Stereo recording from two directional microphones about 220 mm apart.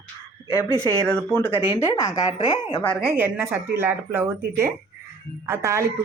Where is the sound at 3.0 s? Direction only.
10° right (ahead or behind).